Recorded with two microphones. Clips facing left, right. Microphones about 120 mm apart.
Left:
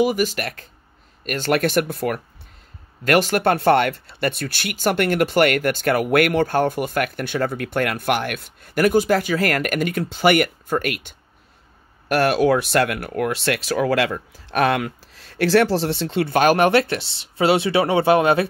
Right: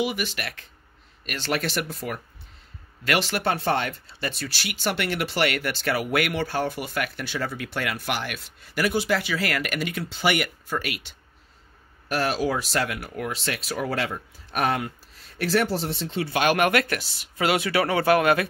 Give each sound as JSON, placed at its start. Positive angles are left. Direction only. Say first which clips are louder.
{"t": 0.0, "sound": "speech", "louder": "left 8 dB", "side_deg": 40}
{"t": 3.0, "sound": "speech", "louder": "left 7 dB", "side_deg": 45}
{"t": 12.1, "sound": "speech", "louder": "left 8 dB", "side_deg": 65}
{"t": 16.5, "sound": "speech", "louder": "left 5 dB", "side_deg": 30}